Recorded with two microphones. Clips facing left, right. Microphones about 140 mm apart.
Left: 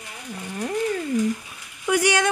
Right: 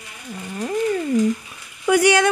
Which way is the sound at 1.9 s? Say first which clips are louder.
Right 5 dB; 70° right (ahead or behind).